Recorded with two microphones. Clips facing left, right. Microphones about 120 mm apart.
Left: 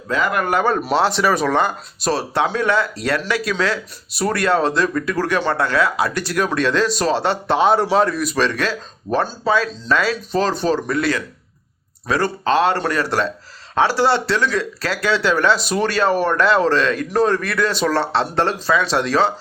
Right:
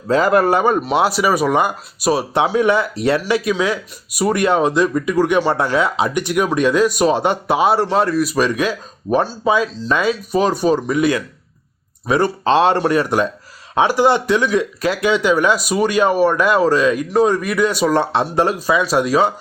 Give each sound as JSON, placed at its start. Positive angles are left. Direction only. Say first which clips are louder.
{"t": 0.1, "sound": "speech", "louder": "right 6 dB", "side_deg": -35}
{"t": 0.9, "sound": "speech", "louder": "right 1 dB", "side_deg": -10}